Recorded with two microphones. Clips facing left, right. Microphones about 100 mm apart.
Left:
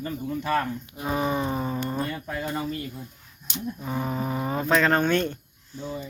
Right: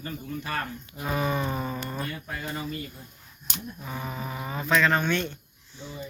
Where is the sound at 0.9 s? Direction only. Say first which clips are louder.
Left 1 dB; 20° left (ahead or behind).